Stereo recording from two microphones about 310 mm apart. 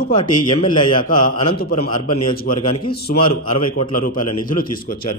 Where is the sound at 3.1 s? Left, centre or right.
Centre.